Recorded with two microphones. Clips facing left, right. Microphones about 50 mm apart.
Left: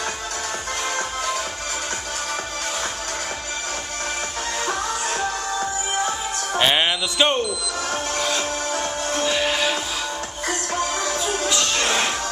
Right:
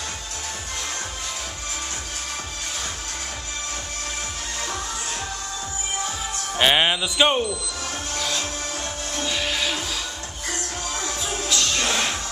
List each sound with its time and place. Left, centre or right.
6.6 s music: centre
7.9 s music: left
11.4 s music: centre
11.8 s music: left